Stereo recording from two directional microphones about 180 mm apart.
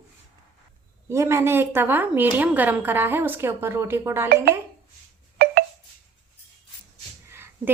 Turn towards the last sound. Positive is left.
turn(degrees=-15)  # may be behind; listen again after turning